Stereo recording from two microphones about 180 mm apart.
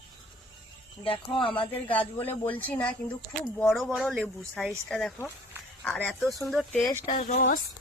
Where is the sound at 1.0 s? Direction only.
30° left (ahead or behind).